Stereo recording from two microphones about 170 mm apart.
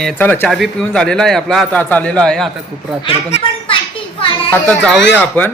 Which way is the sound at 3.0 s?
30° left (ahead or behind).